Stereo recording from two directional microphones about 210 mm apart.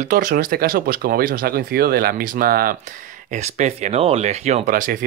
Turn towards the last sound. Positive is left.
turn(degrees=-40)  # may be behind; listen again after turning